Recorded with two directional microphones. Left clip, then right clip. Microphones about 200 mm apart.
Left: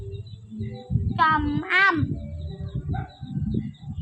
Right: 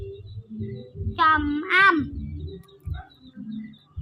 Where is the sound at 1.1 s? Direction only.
Centre (ahead or behind).